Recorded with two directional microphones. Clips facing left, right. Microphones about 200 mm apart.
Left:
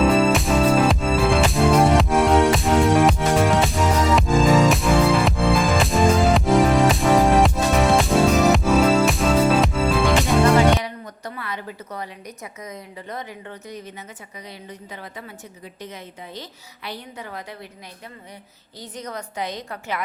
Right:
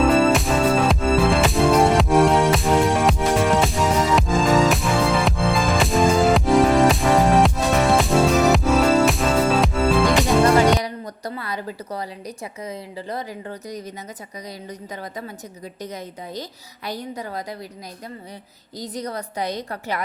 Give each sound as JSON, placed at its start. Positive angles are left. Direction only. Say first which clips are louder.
{"t": 0.0, "sound": "music", "louder": "right 1 dB", "side_deg": 0}
{"t": 10.8, "sound": "a woman's voice", "louder": "right 3 dB", "side_deg": -35}
{"t": 15.8, "sound": "a woman's voice", "louder": "right 4 dB", "side_deg": -40}
{"t": 18.8, "sound": "a woman's voice", "louder": "right 4 dB", "side_deg": -35}